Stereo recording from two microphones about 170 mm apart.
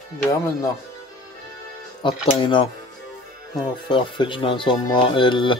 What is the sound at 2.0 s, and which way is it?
Speech, 30° left (ahead or behind).